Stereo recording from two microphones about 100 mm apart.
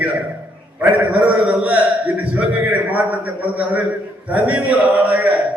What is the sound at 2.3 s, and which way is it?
A man's voice, 15° right (ahead or behind).